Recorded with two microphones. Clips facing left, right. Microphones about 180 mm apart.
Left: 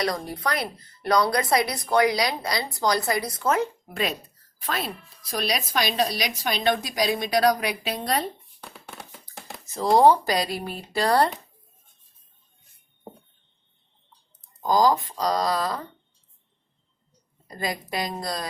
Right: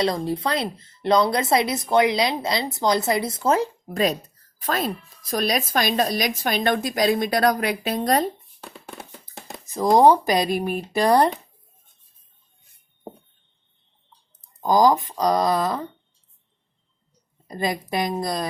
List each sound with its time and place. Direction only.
0.0 s speech: 25° right (ahead or behind); by 8.3 s 45° right (ahead or behind)
9.2 s a sound: 15° right (ahead or behind)
10.0 s speech: 20° right (ahead or behind)
14.6 s speech: 20° right (ahead or behind)
17.5 s speech: 20° right (ahead or behind)